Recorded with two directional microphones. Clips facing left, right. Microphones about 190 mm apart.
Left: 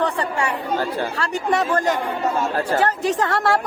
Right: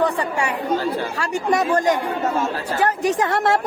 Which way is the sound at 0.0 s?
10° right (ahead or behind).